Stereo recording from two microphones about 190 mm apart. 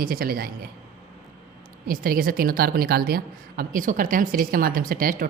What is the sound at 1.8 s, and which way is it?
A woman's voice, 50° right (ahead or behind).